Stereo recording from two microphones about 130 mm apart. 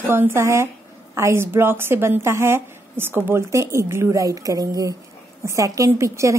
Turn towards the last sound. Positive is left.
turn(degrees=-25)  # may be behind; listen again after turning